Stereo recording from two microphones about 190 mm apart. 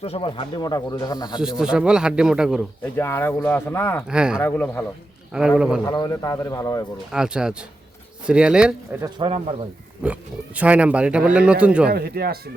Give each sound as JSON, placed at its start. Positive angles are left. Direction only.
{"t": 0.0, "sound": "speech", "side_deg": 30}
{"t": 1.4, "sound": "a man's voice", "side_deg": -5}
{"t": 2.8, "sound": "speech", "side_deg": 10}
{"t": 4.0, "sound": "a man's voice", "side_deg": -5}
{"t": 4.4, "sound": "speech", "side_deg": 10}
{"t": 5.3, "sound": "a man's voice", "side_deg": -5}
{"t": 5.8, "sound": "speech", "side_deg": 20}
{"t": 7.1, "sound": "a man's voice", "side_deg": -5}
{"t": 9.0, "sound": "speech", "side_deg": -25}
{"t": 10.0, "sound": "speech", "side_deg": -5}
{"t": 11.9, "sound": "speech", "side_deg": -55}